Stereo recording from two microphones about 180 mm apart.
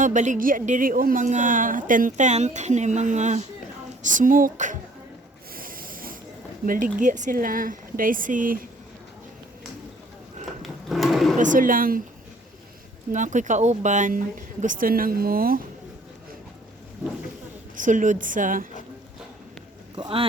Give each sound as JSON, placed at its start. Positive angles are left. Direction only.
{"t": 0.0, "sound": "a woman's voice", "side_deg": -45}
{"t": 5.5, "sound": "a sound", "side_deg": -50}
{"t": 6.7, "sound": "a woman's voice", "side_deg": -50}
{"t": 10.8, "sound": "a sound", "side_deg": 0}
{"t": 11.3, "sound": "a woman's voice", "side_deg": -45}
{"t": 13.1, "sound": "a woman's voice", "side_deg": -45}
{"t": 17.7, "sound": "a woman's voice", "side_deg": -45}
{"t": 20.0, "sound": "speech", "side_deg": -30}